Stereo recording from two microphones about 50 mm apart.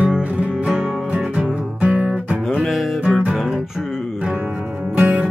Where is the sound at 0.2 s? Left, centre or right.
Right.